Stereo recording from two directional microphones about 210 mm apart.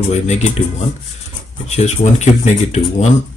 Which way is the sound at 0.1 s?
30° left (ahead or behind).